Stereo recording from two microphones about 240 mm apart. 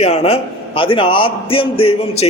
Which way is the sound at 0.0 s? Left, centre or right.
Left.